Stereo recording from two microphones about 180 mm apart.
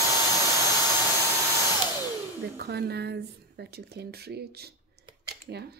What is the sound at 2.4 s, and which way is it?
Speech, 60° right (ahead or behind).